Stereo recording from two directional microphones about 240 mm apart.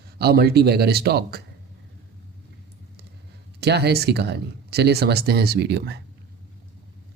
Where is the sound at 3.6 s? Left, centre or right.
Right.